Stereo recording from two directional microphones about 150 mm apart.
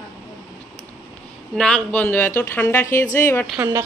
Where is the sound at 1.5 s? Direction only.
5° left (ahead or behind).